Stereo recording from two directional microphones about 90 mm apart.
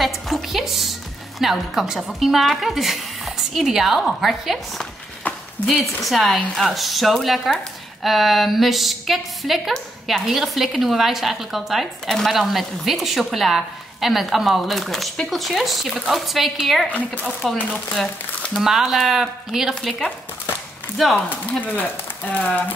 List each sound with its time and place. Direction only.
0.0 s music: centre (ahead or behind)
1.4 s a woman's voice: 5° right (ahead or behind)
18.6 s a woman's voice: 5° right (ahead or behind)
21.5 s speech: 20° left (ahead or behind)